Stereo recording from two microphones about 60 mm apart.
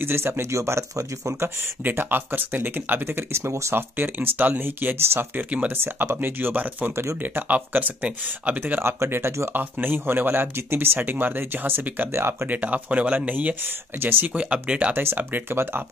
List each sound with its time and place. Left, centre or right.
0.0 s speech: right
1.6 s speech: right
3.3 s speech: right
3.7 s speech: right
5.8 s speech: right
8.8 s speech: right
12.1 s speech: right
12.4 s speech: right
14.3 s speech: centre
15.0 s speech: right